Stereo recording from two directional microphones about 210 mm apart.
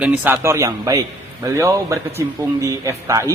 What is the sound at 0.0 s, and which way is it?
A man's voice, 5° right (ahead or behind).